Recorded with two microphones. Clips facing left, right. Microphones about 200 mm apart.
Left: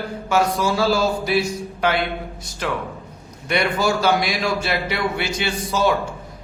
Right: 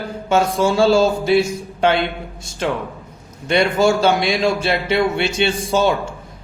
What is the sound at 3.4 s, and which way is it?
A man's voice, 25° right (ahead or behind).